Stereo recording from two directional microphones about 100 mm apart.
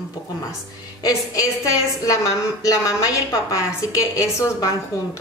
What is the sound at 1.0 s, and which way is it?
A woman's voice, 35° left (ahead or behind).